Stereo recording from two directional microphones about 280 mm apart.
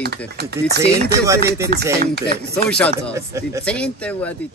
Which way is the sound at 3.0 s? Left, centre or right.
Centre.